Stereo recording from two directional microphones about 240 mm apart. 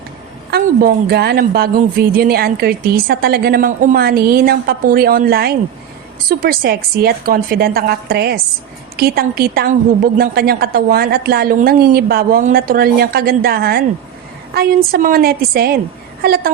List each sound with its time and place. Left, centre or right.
0.5 s a woman's voice: right